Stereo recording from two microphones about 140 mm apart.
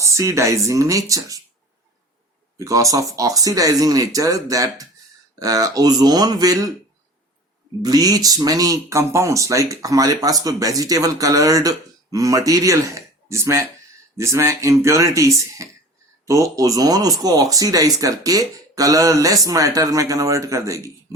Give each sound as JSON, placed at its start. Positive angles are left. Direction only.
{"t": 0.0, "sound": "speech", "side_deg": -20}
{"t": 2.6, "sound": "speech", "side_deg": -25}
{"t": 7.8, "sound": "speech", "side_deg": -25}